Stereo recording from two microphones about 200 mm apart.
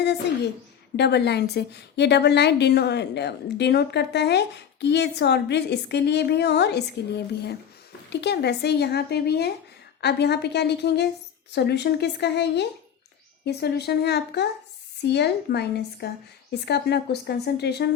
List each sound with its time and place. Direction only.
0.9 s a woman's voice: 55° left (ahead or behind)